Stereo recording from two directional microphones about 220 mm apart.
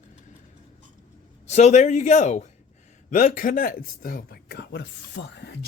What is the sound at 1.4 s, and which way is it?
Speech, 30° left (ahead or behind).